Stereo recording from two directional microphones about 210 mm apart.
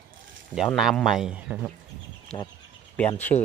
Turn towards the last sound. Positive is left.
turn(degrees=10)  # may be behind; listen again after turning